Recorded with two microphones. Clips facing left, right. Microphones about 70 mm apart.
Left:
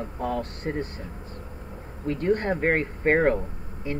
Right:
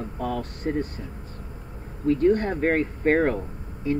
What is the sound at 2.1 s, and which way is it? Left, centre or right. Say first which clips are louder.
Speech: right 4 dB; left.